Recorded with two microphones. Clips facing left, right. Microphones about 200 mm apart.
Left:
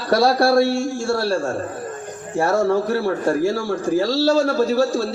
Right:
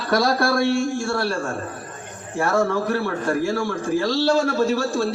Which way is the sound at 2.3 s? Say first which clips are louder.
Left 3 dB; 35° left (ahead or behind).